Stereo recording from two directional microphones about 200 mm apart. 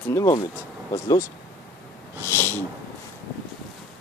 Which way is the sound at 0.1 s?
15° left (ahead or behind).